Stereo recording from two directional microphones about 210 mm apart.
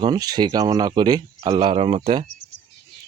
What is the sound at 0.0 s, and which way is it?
Speech, 20° right (ahead or behind).